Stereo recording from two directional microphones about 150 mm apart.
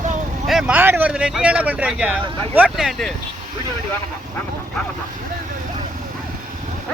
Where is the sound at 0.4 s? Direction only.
Centre (ahead or behind).